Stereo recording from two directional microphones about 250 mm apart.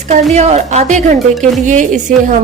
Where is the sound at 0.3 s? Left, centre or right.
Right.